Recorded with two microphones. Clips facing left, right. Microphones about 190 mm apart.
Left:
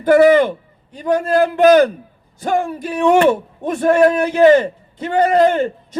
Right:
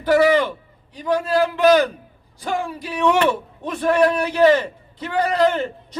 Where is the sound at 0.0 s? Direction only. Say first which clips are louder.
Left 5 dB; 50° left (ahead or behind).